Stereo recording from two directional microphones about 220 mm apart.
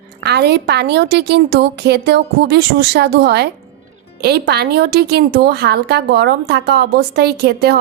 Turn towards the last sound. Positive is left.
turn(degrees=-45)  # may be behind; listen again after turning